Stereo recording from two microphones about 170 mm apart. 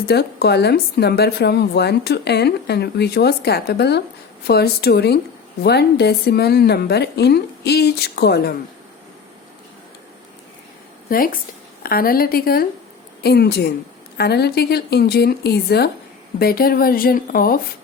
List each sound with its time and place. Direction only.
0.1 s a woman's voice: 70° left (ahead or behind)
11.1 s a woman's voice: 55° left (ahead or behind)